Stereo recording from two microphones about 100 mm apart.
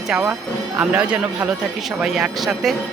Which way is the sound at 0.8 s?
15° right (ahead or behind).